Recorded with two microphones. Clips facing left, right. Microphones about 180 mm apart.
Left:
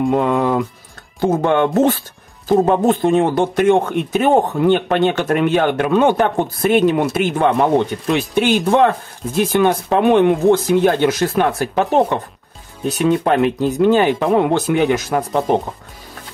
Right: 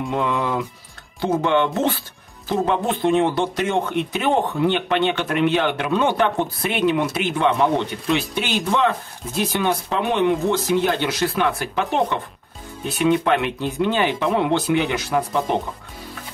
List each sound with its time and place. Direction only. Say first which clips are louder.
0.0 s speech: left 7 dB; 50° left (ahead or behind)